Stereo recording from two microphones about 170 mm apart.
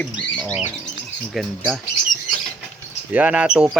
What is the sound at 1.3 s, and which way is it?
Speech, 5° right (ahead or behind).